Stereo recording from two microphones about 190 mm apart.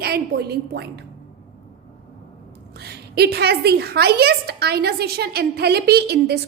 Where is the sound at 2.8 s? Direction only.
60° right (ahead or behind).